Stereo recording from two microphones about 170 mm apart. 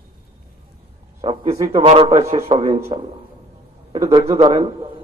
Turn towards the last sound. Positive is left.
turn(degrees=-35)  # may be behind; listen again after turning